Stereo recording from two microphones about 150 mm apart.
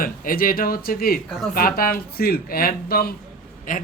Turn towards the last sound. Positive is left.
turn(degrees=65)  # may be behind; listen again after turning